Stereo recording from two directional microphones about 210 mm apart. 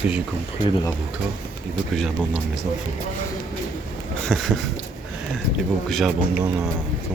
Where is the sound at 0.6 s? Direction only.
20° left (ahead or behind).